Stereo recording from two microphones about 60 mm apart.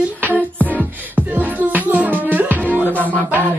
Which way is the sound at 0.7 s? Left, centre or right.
Right.